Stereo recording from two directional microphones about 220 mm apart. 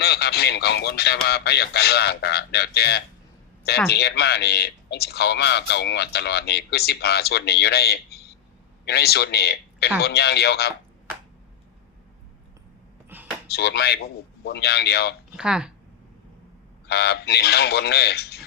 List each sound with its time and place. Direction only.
0.0 s speech: 45° left (ahead or behind)
13.1 s a sound: 10° right (ahead or behind)
13.5 s speech: 50° left (ahead or behind)
15.4 s speech: 5° right (ahead or behind)
16.8 s speech: 50° left (ahead or behind)